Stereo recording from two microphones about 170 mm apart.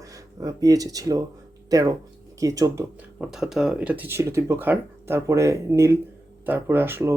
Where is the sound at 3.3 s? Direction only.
5° right (ahead or behind).